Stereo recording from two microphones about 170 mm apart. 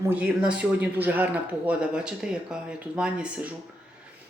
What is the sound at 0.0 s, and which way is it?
Speech, 10° right (ahead or behind).